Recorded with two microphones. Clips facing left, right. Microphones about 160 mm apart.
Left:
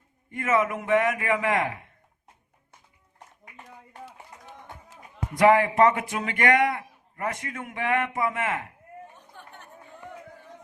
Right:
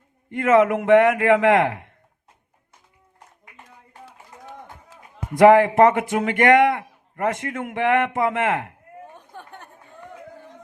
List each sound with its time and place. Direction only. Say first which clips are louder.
0.3 s a man's voice: right 8 dB; 70° right (ahead or behind)
5.4 s a man's voice: right 6 dB; 55° right (ahead or behind)
9.1 s chatter: right 6 dB; 55° right (ahead or behind)